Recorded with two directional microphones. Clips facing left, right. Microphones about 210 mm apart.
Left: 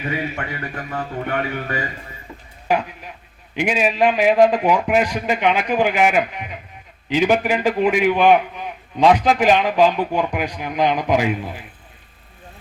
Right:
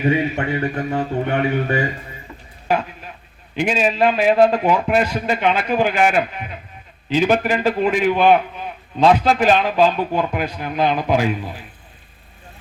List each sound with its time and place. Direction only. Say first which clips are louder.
0.3 s a man's voice: right 7 dB; 25° right (ahead or behind)
2.6 s a sound: even; 15° left (ahead or behind)
3.5 s a man's voice: right 1 dB; 15° left (ahead or behind)